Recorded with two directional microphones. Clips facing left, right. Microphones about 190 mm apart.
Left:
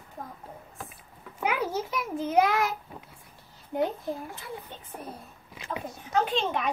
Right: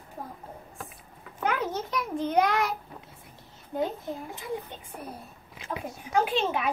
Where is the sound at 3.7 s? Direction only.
20° left (ahead or behind).